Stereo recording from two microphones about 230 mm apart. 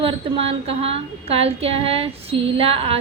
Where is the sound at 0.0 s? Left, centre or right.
Right.